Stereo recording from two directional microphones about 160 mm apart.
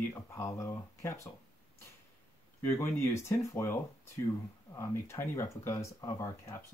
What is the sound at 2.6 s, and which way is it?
Speech, 15° left (ahead or behind).